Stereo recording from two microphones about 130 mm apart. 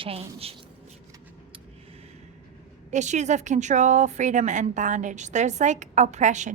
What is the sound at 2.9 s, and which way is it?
A woman's voice, 65° right (ahead or behind).